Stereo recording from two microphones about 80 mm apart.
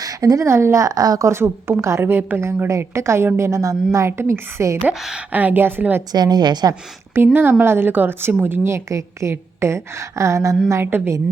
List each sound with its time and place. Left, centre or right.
0.0 s speech: right
1.3 s a woman's voice: right
4.8 s a woman's voice: centre
5.3 s a woman's voice: right
6.1 s a woman's voice: right
7.1 s a woman's voice: right
10.7 s a woman's voice: right